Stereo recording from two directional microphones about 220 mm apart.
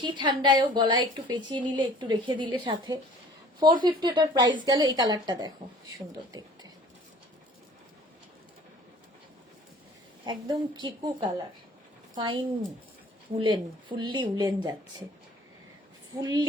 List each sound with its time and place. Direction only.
0.0 s a woman's voice: 20° right (ahead or behind)
10.2 s a woman's voice: 20° right (ahead or behind)
16.2 s a woman's voice: 20° right (ahead or behind)